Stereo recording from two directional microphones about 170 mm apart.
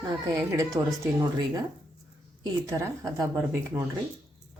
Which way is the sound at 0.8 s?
20° right (ahead or behind).